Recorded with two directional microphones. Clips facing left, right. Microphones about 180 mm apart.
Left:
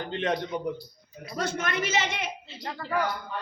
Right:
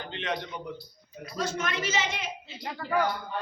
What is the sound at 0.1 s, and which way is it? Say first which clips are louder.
Speech: left 5 dB; 45° left (ahead or behind).